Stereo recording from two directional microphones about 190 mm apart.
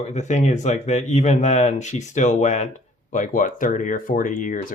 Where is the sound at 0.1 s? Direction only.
35° left (ahead or behind).